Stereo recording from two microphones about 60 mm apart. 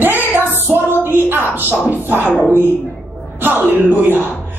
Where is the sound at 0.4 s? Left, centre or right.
Right.